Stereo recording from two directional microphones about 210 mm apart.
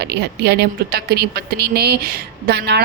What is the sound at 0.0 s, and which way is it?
A woman's voice, 50° right (ahead or behind).